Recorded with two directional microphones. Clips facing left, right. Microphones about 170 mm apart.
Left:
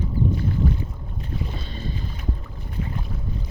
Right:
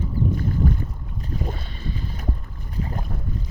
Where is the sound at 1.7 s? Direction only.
25° left (ahead or behind).